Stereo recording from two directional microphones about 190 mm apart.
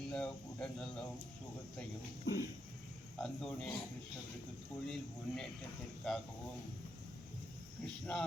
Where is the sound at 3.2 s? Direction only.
5° left (ahead or behind).